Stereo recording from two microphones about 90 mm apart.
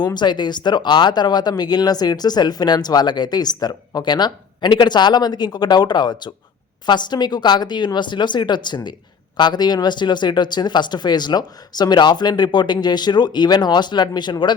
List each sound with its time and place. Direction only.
0.0 s speech: 55° left (ahead or behind)